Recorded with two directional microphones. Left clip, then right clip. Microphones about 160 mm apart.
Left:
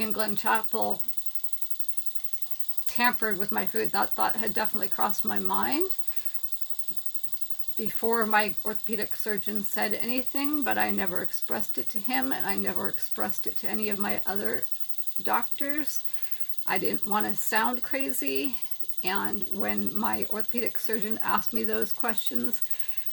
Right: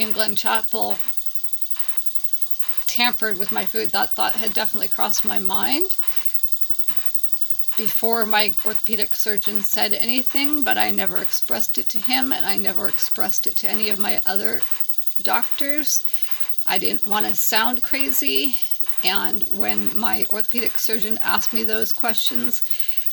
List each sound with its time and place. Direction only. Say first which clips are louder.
0.0 s speech: right 6 dB; 15° right (ahead or behind)
2.9 s speech: right 5 dB; 15° right (ahead or behind)
8.0 s speech: right 4 dB; 20° right (ahead or behind)